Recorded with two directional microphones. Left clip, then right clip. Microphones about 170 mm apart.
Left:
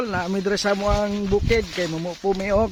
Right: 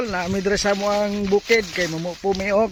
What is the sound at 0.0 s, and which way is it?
Speech, 5° right (ahead or behind).